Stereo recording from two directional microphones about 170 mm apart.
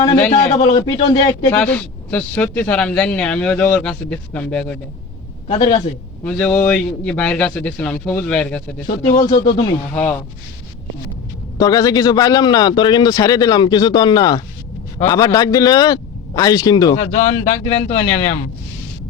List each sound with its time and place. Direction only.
0.6 s a man's voice: 25° left (ahead or behind)
1.5 s speech: 10° left (ahead or behind)
5.5 s a man's voice: 25° left (ahead or behind)
6.2 s speech: 10° left (ahead or behind)
9.5 s a man's voice: 25° left (ahead or behind)
9.9 s speech: 10° left (ahead or behind)
11.5 s a man's voice: 20° left (ahead or behind)
17.0 s a man's voice: 40° left (ahead or behind)